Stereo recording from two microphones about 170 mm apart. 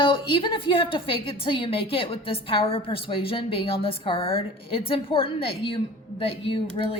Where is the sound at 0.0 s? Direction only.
30° left (ahead or behind).